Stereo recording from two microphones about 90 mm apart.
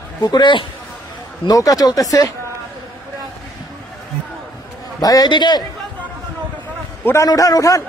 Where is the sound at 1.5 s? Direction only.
45° left (ahead or behind).